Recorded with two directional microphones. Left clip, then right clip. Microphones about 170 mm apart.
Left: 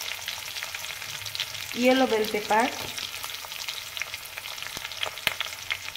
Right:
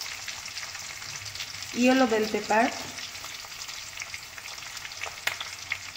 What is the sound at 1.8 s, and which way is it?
Frying, 15° left (ahead or behind).